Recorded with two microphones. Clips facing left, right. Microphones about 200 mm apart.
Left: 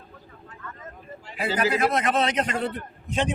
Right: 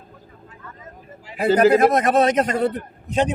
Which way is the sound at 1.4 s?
50° right (ahead or behind).